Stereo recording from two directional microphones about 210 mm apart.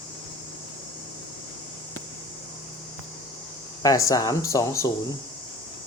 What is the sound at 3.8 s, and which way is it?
Speech, 15° left (ahead or behind).